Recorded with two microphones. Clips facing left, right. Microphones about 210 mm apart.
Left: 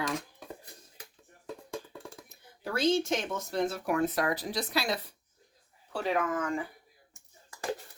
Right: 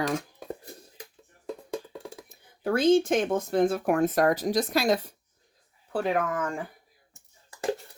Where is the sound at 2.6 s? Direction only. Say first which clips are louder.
Right 6 dB; 55° right (ahead or behind).